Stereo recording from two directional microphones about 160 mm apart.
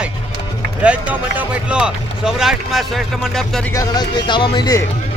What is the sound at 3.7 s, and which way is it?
Speech, 25° left (ahead or behind).